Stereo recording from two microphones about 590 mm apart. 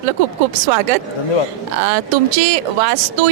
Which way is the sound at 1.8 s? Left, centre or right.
Right.